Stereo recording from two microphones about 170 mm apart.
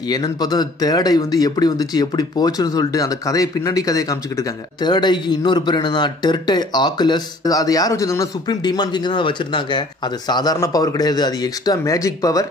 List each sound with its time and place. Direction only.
0.1 s speech: 25° left (ahead or behind)